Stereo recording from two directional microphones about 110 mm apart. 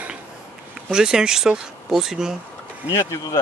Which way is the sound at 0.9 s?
5° right (ahead or behind).